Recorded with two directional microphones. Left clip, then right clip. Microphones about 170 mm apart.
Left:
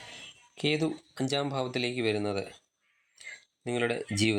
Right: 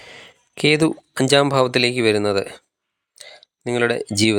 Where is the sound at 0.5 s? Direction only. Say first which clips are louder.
Right 12 dB; 50° right (ahead or behind).